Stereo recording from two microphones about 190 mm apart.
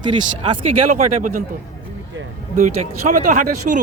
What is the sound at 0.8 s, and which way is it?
Speech, 45° right (ahead or behind).